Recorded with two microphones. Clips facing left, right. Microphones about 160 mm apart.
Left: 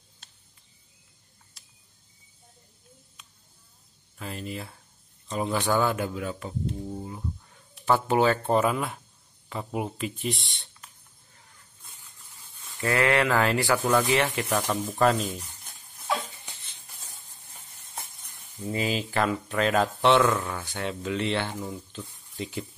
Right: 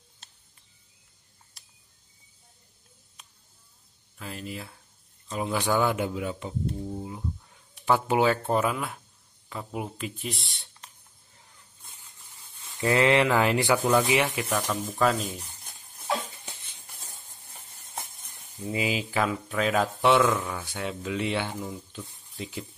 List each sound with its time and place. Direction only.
4.2 s speech: centre (ahead or behind); by 6.5 s 20° right (ahead or behind)
6.8 s speech: 5° right (ahead or behind)
12.8 s speech: 20° right (ahead or behind); by 15.2 s centre (ahead or behind)
18.6 s speech: 10° right (ahead or behind)